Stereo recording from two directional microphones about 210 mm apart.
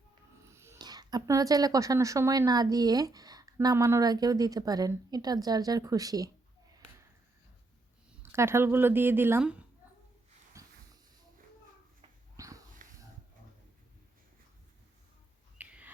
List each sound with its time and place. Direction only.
0.5 s speech: 10° right (ahead or behind)
8.2 s speech: 10° right (ahead or behind)
10.5 s a sound: 15° right (ahead or behind)
12.4 s dog: 15° right (ahead or behind)
15.5 s bird: 5° right (ahead or behind)